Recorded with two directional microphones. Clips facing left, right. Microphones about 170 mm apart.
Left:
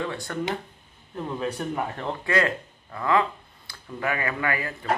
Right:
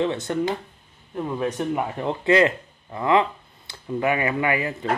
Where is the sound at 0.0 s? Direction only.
20° right (ahead or behind).